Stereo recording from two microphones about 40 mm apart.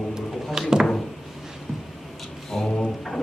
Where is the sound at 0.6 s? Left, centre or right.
Centre.